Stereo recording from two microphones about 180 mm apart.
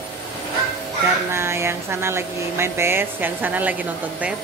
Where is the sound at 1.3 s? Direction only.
15° right (ahead or behind).